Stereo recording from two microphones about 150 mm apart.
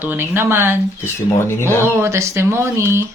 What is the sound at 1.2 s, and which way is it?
Speech, 15° left (ahead or behind).